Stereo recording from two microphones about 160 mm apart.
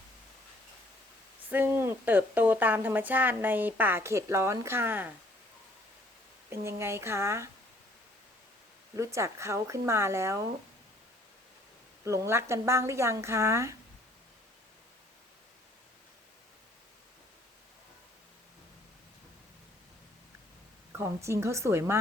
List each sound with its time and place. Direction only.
1.5 s speech: 10° right (ahead or behind)
6.5 s speech: 15° right (ahead or behind)
9.0 s speech: 20° right (ahead or behind)
12.0 s speech: 15° right (ahead or behind)
20.9 s speech: 15° right (ahead or behind)